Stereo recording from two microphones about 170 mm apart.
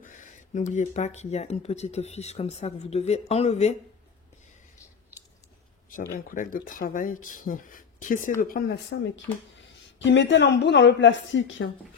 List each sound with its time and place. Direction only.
0.0 s speech: 45° left (ahead or behind)
6.1 s speech: 55° left (ahead or behind)
8.4 s a woman's voice: 65° left (ahead or behind); by 11.6 s 90° left